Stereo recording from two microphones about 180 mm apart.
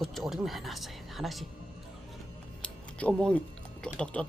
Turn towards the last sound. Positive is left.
turn(degrees=5)  # may be behind; listen again after turning